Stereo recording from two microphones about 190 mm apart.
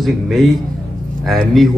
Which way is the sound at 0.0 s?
Centre (ahead or behind).